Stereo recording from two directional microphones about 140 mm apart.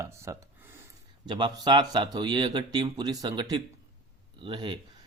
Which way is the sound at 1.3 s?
30° right (ahead or behind).